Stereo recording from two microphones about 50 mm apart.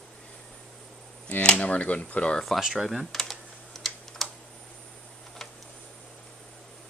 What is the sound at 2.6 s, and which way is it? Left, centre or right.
Speech, centre.